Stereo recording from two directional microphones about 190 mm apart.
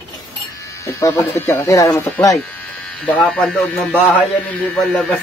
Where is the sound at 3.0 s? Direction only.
5° left (ahead or behind).